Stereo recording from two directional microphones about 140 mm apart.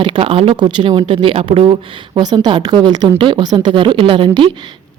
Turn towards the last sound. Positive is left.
turn(degrees=-40)  # may be behind; listen again after turning